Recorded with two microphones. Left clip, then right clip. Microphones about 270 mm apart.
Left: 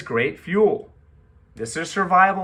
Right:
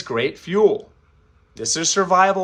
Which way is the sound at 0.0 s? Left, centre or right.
Centre.